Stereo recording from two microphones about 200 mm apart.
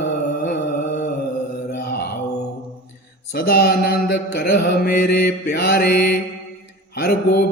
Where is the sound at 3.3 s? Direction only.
50° left (ahead or behind).